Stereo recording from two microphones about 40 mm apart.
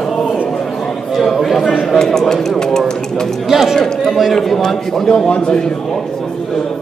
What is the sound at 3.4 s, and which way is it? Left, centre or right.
A man's voice, centre.